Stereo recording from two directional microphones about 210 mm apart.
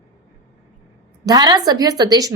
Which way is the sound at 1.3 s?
20° right (ahead or behind).